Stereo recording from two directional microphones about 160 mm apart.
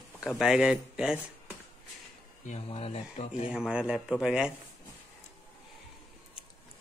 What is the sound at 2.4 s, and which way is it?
Speech, 40° left (ahead or behind).